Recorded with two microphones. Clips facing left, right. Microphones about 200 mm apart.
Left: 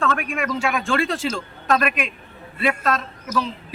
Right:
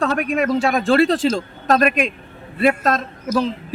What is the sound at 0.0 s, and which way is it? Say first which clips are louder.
A woman's voice: right 5 dB; 40° right (ahead or behind).